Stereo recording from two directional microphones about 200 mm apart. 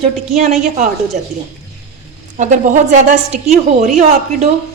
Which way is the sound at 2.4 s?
40° right (ahead or behind).